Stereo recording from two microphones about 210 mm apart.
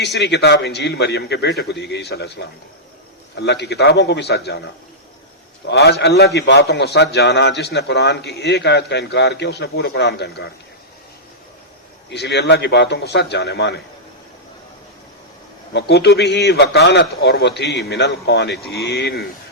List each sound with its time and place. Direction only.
0.0 s a man's voice: 55° left (ahead or behind)
12.1 s a man's voice: 50° left (ahead or behind)
15.7 s a man's voice: 50° left (ahead or behind)